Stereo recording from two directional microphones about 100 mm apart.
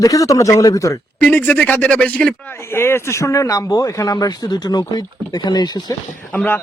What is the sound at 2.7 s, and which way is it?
Speech, 25° left (ahead or behind).